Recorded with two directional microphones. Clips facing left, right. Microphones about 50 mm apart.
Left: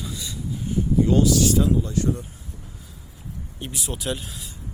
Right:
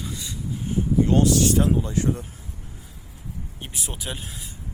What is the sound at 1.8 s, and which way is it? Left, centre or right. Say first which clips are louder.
Speech: even; right.